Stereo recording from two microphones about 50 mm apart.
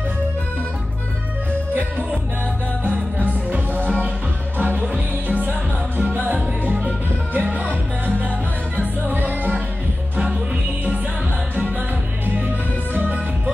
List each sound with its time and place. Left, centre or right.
1.7 s music: right
3.3 s music: right
12.9 s music: right